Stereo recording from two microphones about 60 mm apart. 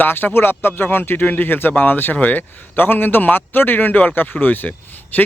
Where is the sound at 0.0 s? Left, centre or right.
Left.